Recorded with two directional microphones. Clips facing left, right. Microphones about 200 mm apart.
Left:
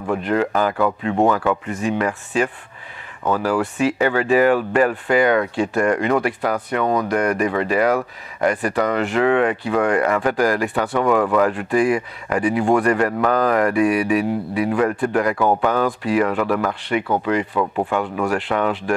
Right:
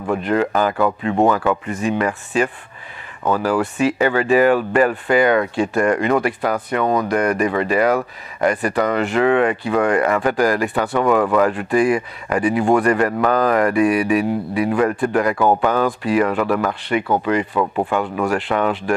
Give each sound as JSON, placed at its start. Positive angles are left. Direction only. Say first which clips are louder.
{"t": 0.0, "sound": "speech", "louder": "right 1 dB", "side_deg": -20}